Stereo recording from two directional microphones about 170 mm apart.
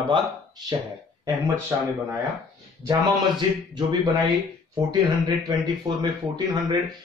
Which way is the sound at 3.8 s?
25° right (ahead or behind).